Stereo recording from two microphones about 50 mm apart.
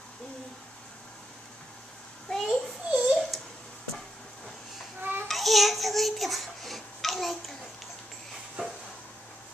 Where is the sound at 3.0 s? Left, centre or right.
Centre.